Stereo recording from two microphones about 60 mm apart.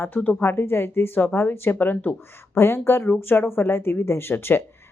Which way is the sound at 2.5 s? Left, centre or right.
Left.